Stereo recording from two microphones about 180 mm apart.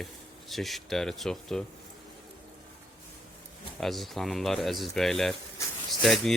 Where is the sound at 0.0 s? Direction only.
Centre (ahead or behind).